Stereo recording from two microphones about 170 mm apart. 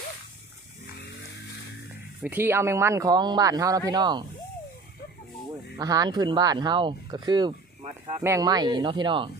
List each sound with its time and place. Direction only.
2.2 s speech: 10° right (ahead or behind)
5.7 s speech: 20° right (ahead or behind)
7.8 s a sound: 35° right (ahead or behind)
8.2 s speech: 20° right (ahead or behind)